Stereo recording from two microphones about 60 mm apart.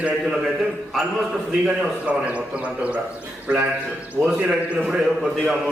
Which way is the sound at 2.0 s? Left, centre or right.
Right.